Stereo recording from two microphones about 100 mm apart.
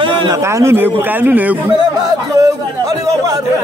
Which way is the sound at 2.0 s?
35° right (ahead or behind).